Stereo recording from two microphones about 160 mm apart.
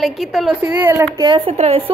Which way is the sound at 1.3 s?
40° right (ahead or behind).